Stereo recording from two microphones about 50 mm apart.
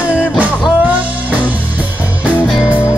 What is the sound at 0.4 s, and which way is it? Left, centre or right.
Music, right.